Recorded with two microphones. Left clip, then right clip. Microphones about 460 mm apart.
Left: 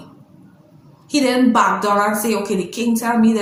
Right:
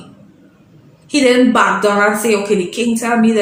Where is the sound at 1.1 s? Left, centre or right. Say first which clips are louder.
Right 4 dB; left.